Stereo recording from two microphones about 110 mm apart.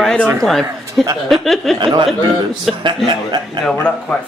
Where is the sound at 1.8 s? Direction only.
45° right (ahead or behind).